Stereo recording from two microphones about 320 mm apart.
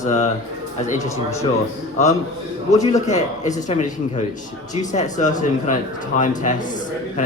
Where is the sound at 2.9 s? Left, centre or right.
Left.